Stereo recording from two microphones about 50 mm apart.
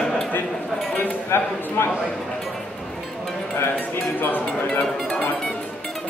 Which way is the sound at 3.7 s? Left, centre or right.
Left.